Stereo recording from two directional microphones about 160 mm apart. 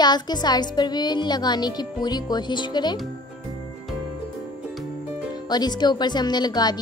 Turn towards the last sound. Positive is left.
turn(degrees=25)  # may be behind; listen again after turning